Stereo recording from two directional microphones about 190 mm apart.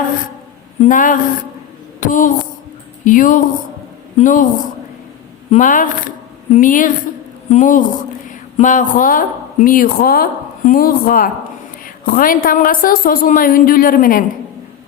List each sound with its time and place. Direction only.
0.8 s a woman's voice: 45° left (ahead or behind)
2.0 s a sound: 45° left (ahead or behind)
3.0 s a woman's voice: 45° left (ahead or behind)
5.5 s a woman's voice: 45° left (ahead or behind)